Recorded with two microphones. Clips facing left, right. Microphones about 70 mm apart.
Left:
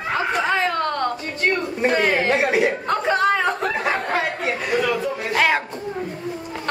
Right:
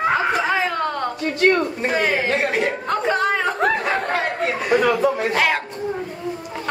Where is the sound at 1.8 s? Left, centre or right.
Centre.